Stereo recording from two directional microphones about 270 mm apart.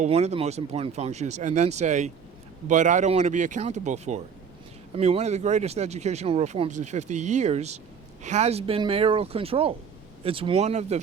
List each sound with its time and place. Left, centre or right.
0.0 s speech: right